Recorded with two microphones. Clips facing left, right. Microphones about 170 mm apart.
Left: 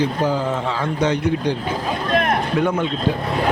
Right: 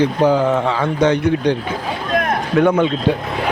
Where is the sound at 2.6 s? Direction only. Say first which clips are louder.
Right 9 dB; 70° right (ahead or behind).